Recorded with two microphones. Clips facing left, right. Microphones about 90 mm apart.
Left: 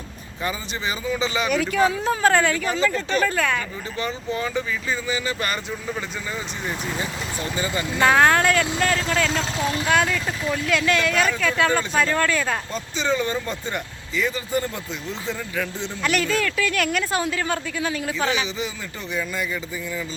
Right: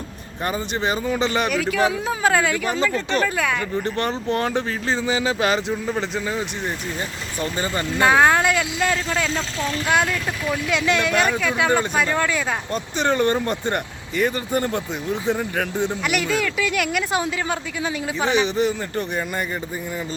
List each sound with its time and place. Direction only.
0.4 s speech: 55° right (ahead or behind)
1.5 s speech: centre (ahead or behind)
3.8 s speech: 65° right (ahead or behind)
7.5 s speech: 40° right (ahead or behind)
8.0 s speech: 15° right (ahead or behind)
10.1 s speech: 5° right (ahead or behind)
10.7 s speech: 20° right (ahead or behind)
12.7 s speech: 60° right (ahead or behind)
16.0 s speech: 15° right (ahead or behind)
18.4 s speech: 60° right (ahead or behind)